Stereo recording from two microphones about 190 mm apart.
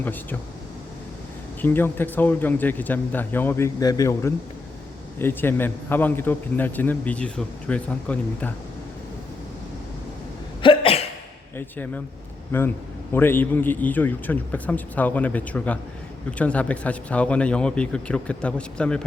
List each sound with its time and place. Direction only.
0.0 s a man's voice: 10° left (ahead or behind)
1.6 s a man's voice: 10° left (ahead or behind)
10.6 s cough: 30° left (ahead or behind)
11.5 s a man's voice: 10° left (ahead or behind)